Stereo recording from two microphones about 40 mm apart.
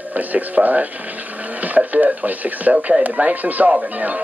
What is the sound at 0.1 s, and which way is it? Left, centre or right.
Speech, right.